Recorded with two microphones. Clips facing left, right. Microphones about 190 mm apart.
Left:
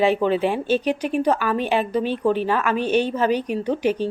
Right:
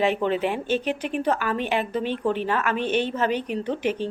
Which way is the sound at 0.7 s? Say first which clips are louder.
Left 4 dB; 10° left (ahead or behind).